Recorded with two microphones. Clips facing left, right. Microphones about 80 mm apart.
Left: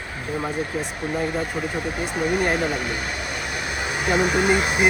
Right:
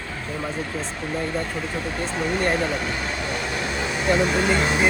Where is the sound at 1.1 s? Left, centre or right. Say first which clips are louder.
Left 2 dB; centre.